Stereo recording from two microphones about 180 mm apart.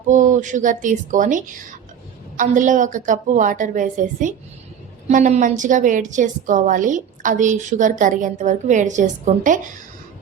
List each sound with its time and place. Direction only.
0.1 s a woman's voice: 45° right (ahead or behind)